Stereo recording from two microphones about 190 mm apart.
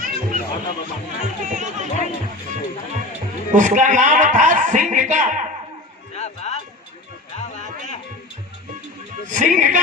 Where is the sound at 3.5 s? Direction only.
40° right (ahead or behind).